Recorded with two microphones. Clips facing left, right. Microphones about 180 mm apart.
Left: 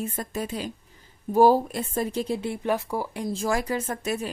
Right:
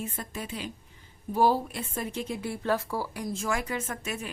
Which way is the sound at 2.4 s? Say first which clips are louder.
Left 2 dB; 20° left (ahead or behind).